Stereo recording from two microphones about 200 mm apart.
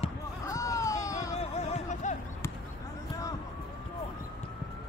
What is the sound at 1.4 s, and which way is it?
Music, 30° left (ahead or behind).